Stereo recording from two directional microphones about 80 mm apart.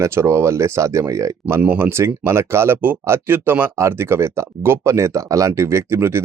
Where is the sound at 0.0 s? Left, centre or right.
Right.